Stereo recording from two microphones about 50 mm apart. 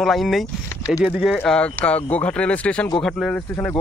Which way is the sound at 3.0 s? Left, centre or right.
Centre.